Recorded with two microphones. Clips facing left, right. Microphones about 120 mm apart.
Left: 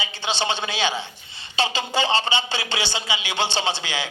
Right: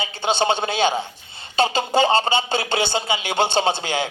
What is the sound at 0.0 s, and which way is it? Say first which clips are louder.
A man's voice: right 5 dB; 45° right (ahead or behind).